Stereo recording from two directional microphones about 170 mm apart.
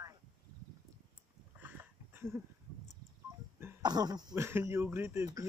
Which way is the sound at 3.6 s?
20° right (ahead or behind).